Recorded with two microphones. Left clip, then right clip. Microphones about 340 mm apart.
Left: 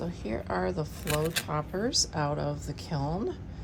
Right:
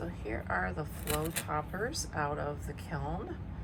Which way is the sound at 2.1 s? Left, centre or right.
Left.